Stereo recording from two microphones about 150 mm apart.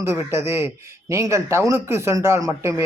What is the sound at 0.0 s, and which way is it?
Speech, 20° right (ahead or behind).